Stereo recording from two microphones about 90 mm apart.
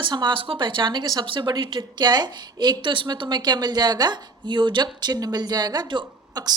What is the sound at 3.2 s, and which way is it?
A woman's voice, 55° right (ahead or behind).